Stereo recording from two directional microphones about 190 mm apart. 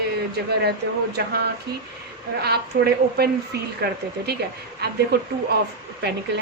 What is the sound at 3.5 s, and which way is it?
Speech, 60° right (ahead or behind).